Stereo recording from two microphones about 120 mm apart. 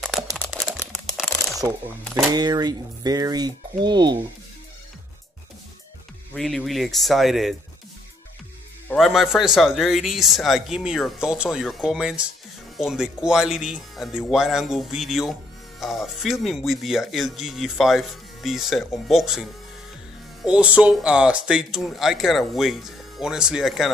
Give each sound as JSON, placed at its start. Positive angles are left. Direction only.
{"t": 1.6, "sound": "speech", "side_deg": -25}
{"t": 2.3, "sound": "speech", "side_deg": -35}
{"t": 6.3, "sound": "speech", "side_deg": 5}
{"t": 8.9, "sound": "speech", "side_deg": 0}